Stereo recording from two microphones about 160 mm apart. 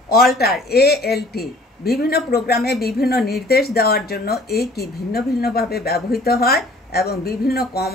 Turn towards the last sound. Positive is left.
turn(degrees=75)  # may be behind; listen again after turning